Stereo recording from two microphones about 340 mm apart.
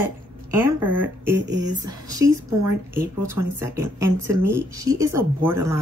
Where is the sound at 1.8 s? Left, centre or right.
Centre.